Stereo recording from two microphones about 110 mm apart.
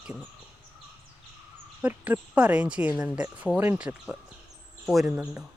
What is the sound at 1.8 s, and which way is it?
Speech, 15° right (ahead or behind).